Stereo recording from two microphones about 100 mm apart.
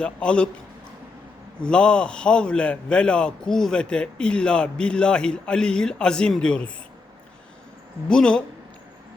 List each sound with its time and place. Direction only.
0.0 s a man's voice: 10° left (ahead or behind)
1.6 s a man's voice: 10° left (ahead or behind)
8.0 s a man's voice: 10° left (ahead or behind)